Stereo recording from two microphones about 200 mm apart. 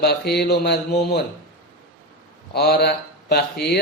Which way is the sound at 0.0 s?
55° left (ahead or behind).